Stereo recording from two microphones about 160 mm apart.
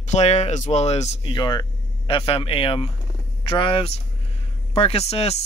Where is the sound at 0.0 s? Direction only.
45° left (ahead or behind).